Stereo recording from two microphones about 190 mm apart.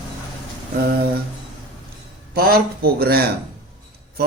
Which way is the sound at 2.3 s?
50° right (ahead or behind).